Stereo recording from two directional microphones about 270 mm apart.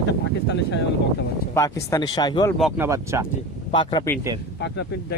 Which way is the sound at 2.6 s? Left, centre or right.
Centre.